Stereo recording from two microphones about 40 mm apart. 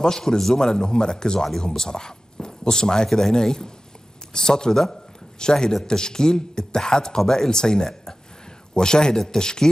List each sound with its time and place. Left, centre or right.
0.0 s speech: centre